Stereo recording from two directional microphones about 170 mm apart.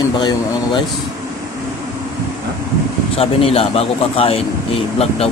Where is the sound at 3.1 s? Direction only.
35° left (ahead or behind).